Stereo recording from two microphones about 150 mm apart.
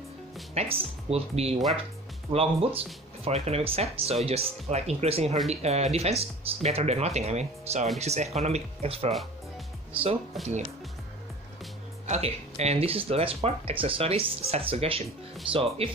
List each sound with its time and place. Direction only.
0.6 s speech: 40° right (ahead or behind)
12.1 s speech: 45° right (ahead or behind)